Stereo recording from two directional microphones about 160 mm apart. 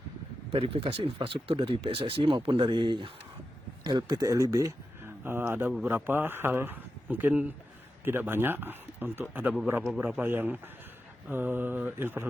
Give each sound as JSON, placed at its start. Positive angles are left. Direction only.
{"t": 0.5, "sound": "speech", "side_deg": -35}